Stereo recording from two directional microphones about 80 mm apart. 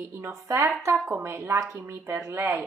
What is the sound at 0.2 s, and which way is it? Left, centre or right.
A woman's voice, right.